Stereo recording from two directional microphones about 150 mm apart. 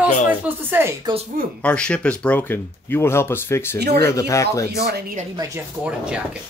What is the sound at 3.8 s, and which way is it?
Speech, 90° right.